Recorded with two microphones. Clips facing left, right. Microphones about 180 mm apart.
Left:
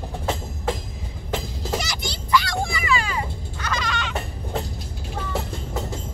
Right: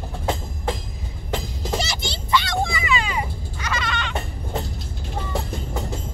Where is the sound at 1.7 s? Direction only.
25° right (ahead or behind).